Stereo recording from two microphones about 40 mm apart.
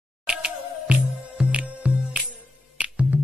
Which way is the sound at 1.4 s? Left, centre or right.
Right.